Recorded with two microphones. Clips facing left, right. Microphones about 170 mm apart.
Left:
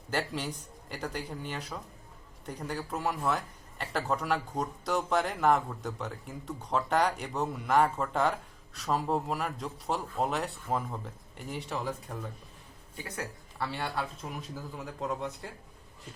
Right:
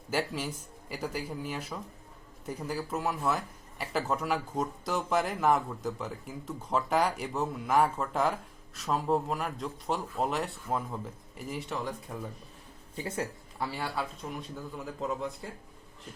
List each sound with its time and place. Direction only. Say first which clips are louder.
0.1 s speech: right 1 dB; 5° right (ahead or behind)
13.0 s speech: right 5 dB; 30° right (ahead or behind)
13.6 s speech: even; 10° right (ahead or behind)